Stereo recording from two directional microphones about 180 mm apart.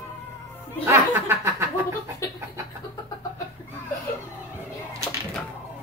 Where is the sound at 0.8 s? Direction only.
15° right (ahead or behind).